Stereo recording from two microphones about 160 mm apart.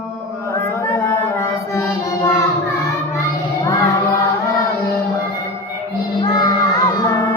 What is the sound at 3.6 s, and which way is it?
Music, 20° left (ahead or behind).